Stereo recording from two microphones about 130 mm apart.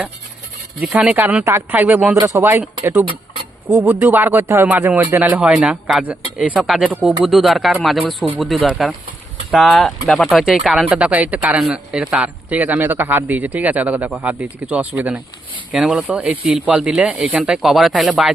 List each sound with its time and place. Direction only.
0.8 s speech: 10° right (ahead or behind)
2.1 s speech: 25° right (ahead or behind)
5.5 s speech: centre (ahead or behind)
6.0 s speech: 10° right (ahead or behind)